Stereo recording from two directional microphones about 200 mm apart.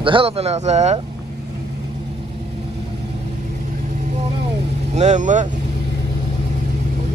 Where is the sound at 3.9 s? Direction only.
35° right (ahead or behind).